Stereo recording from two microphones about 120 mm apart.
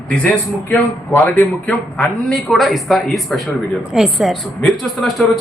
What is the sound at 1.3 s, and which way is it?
Speech, 15° left (ahead or behind).